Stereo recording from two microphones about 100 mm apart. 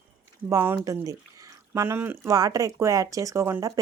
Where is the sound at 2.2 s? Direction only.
35° right (ahead or behind).